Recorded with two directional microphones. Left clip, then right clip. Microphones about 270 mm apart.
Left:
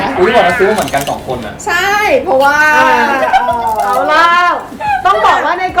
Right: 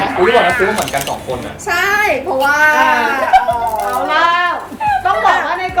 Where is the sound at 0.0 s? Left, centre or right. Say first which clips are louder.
Left 2 dB; centre.